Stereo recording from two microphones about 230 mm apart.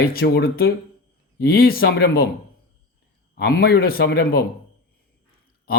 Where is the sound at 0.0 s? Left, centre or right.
Left.